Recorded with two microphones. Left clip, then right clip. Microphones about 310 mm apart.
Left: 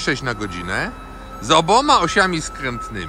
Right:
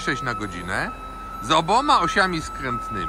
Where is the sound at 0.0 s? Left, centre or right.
Centre.